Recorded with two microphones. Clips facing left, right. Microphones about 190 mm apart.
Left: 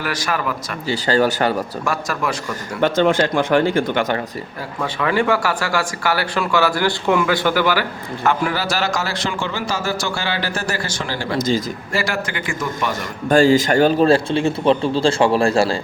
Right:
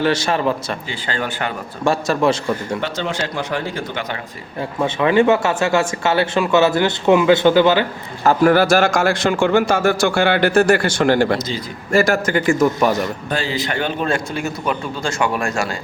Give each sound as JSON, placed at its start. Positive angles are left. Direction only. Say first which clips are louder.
{"t": 0.0, "sound": "speech", "louder": "right 6 dB", "side_deg": -25}
{"t": 0.9, "sound": "speech", "louder": "left 12 dB", "side_deg": 40}
{"t": 1.8, "sound": "speech", "louder": "right 6 dB", "side_deg": -25}
{"t": 2.8, "sound": "speech", "louder": "left 7 dB", "side_deg": 50}
{"t": 4.8, "sound": "speech", "louder": "right 5 dB", "side_deg": -20}
{"t": 8.2, "sound": "a man's voice", "louder": "right 6 dB", "side_deg": -35}
{"t": 8.5, "sound": "a man's voice", "louder": "right 7 dB", "side_deg": -50}
{"t": 11.3, "sound": "speech", "louder": "left 6 dB", "side_deg": 45}
{"t": 11.9, "sound": "a man's voice", "louder": "right 11 dB", "side_deg": -45}
{"t": 13.0, "sound": "speech", "louder": "left 7 dB", "side_deg": 45}